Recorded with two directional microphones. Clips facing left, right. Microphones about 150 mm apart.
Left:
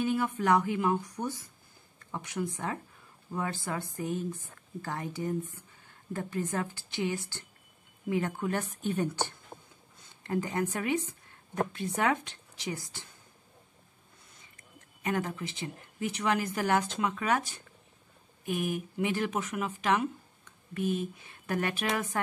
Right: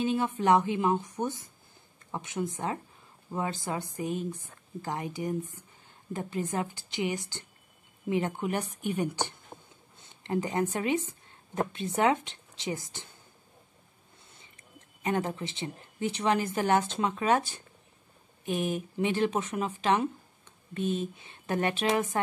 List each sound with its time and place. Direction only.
0.0 s a woman's voice: 25° right (ahead or behind)
10.2 s a woman's voice: 20° right (ahead or behind)
14.4 s speech: 25° right (ahead or behind)